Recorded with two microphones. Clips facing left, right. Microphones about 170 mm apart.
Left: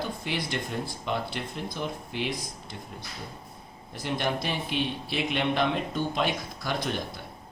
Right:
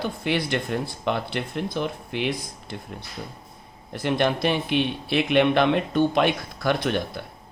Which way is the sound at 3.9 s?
65° right (ahead or behind).